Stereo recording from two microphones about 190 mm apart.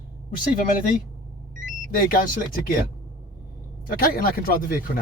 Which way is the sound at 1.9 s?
50° left (ahead or behind).